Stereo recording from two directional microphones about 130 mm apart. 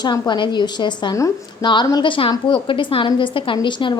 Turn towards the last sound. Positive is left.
turn(degrees=40)  # may be behind; listen again after turning